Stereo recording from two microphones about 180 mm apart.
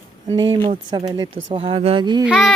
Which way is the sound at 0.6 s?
30° right (ahead or behind).